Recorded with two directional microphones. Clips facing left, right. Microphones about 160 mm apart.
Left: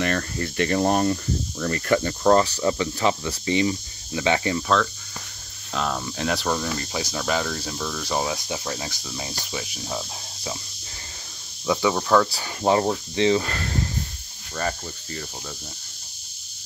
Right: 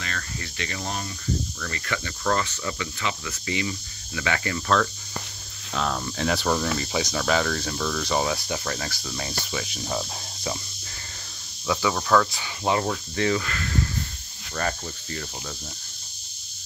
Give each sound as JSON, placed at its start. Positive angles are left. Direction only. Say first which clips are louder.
{"t": 0.0, "sound": "speech", "louder": "left 10 dB", "side_deg": 55}
{"t": 5.8, "sound": "speech", "louder": "even", "side_deg": 5}
{"t": 11.6, "sound": "speech", "louder": "left 3 dB", "side_deg": 20}
{"t": 12.3, "sound": "speech", "louder": "left 4 dB", "side_deg": 35}
{"t": 13.5, "sound": "speech", "louder": "even", "side_deg": 35}
{"t": 14.5, "sound": "speech", "louder": "left 1 dB", "side_deg": 5}